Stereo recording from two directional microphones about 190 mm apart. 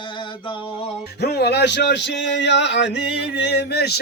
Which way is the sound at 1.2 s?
60° left (ahead or behind).